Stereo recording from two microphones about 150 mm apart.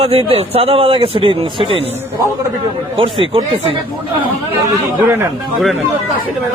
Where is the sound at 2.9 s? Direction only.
35° right (ahead or behind).